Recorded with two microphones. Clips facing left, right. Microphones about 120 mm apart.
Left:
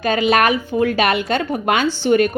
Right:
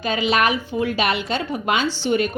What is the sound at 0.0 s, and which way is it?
A woman's voice, 50° left (ahead or behind).